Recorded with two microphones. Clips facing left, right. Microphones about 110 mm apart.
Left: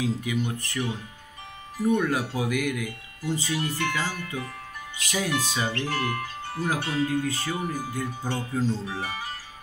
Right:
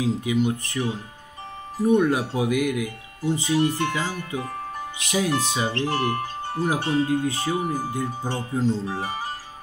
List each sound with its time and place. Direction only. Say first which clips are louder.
0.0 s speech: right 5 dB; 20° right (ahead or behind); by 4.8 s 35° right (ahead or behind)
4.9 s speech: right 4 dB; 20° right (ahead or behind)